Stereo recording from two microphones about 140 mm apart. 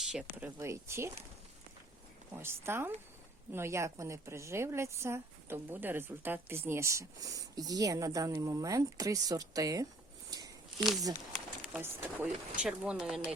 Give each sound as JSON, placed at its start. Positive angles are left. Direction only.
{"t": 0.0, "sound": "speech", "side_deg": -5}
{"t": 2.3, "sound": "speech", "side_deg": -15}
{"t": 10.2, "sound": "a sound", "side_deg": -30}
{"t": 11.3, "sound": "pigeon", "side_deg": -5}
{"t": 11.8, "sound": "speech", "side_deg": -15}